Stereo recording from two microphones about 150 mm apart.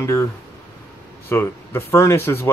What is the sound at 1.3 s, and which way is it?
Speech, 15° left (ahead or behind).